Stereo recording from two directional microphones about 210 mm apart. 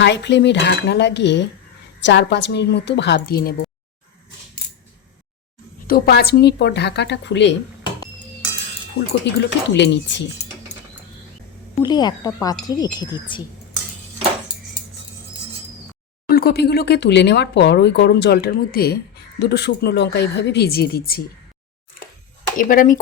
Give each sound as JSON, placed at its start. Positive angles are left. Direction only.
{"t": 0.0, "sound": "a woman's voice", "side_deg": 55}
{"t": 5.9, "sound": "speech", "side_deg": 50}
{"t": 9.3, "sound": "a woman's voice", "side_deg": 55}
{"t": 11.8, "sound": "speech", "side_deg": 20}
{"t": 16.3, "sound": "speech", "side_deg": 45}
{"t": 22.5, "sound": "speech", "side_deg": 40}